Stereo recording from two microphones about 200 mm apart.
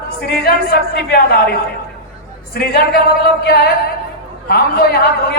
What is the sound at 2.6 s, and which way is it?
A man's voice, 50° left (ahead or behind).